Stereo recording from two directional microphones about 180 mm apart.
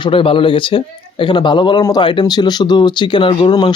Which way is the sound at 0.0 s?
30° left (ahead or behind).